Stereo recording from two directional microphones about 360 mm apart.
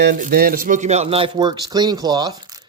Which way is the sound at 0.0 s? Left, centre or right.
Right.